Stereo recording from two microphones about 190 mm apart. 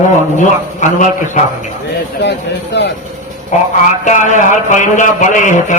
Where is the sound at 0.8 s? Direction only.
40° left (ahead or behind).